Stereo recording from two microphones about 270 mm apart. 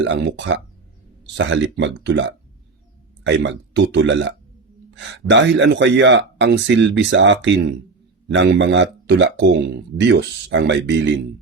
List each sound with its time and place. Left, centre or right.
0.0 s speech: right